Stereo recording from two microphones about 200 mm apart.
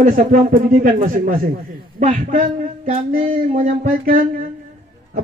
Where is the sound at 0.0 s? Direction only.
45° right (ahead or behind).